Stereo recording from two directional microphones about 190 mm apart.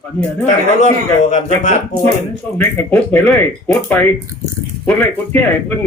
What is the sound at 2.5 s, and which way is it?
Speech, 10° left (ahead or behind).